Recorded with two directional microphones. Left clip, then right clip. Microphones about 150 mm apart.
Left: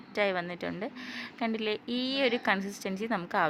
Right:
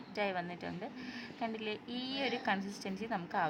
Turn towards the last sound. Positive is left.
turn(degrees=25)  # may be behind; listen again after turning